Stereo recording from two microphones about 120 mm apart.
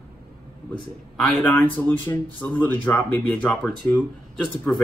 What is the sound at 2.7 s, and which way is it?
Speech, 20° left (ahead or behind).